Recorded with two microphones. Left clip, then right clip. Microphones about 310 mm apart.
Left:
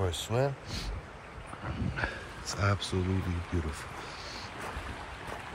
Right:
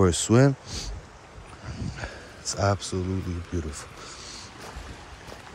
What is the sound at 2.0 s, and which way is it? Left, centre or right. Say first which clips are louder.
Speech: left 6 dB; centre.